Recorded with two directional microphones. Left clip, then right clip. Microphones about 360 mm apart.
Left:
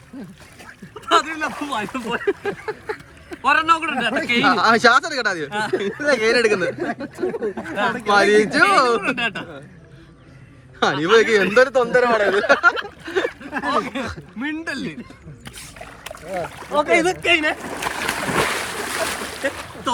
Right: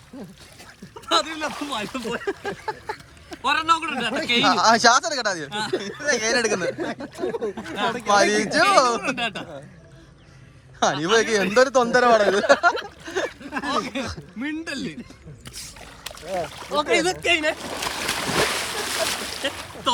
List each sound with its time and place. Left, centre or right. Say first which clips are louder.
1.0 s speech: left 4 dB; centre
10.8 s speech: left 4 dB; centre
11.5 s speech: even; centre
12.7 s speech: left 4 dB; centre
15.4 s boat: left 2 dB; centre